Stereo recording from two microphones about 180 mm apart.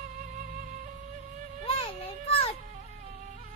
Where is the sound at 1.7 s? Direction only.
30° left (ahead or behind).